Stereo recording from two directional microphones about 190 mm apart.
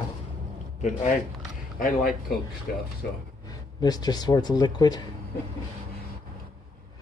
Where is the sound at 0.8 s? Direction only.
40° left (ahead or behind).